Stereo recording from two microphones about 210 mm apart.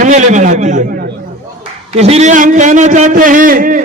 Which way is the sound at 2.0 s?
30° right (ahead or behind).